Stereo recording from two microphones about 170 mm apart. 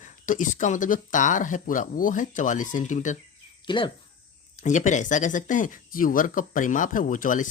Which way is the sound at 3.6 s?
30° left (ahead or behind).